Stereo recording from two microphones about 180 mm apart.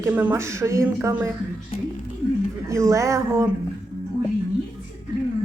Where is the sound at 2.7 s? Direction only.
15° right (ahead or behind).